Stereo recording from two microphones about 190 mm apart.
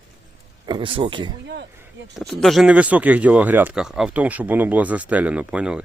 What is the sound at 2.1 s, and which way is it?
Speech, centre (ahead or behind).